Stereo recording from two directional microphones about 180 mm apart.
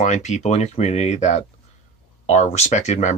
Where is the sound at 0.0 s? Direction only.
40° left (ahead or behind).